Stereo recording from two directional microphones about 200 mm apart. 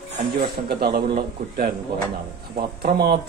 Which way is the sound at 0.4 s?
50° right (ahead or behind).